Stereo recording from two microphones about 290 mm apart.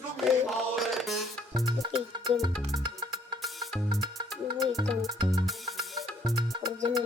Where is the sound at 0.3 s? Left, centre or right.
Centre.